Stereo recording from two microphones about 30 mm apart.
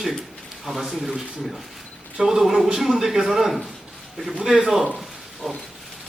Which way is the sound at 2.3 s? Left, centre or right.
Centre.